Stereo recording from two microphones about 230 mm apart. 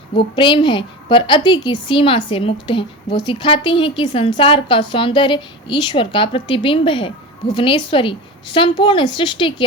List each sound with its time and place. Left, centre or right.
0.2 s a woman's voice: left